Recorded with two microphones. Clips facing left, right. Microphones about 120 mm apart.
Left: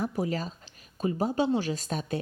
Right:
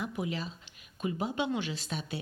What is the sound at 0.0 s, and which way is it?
A woman's voice, 40° left (ahead or behind).